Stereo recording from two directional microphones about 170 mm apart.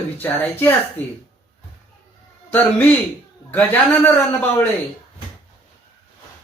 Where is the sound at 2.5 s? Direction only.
10° left (ahead or behind).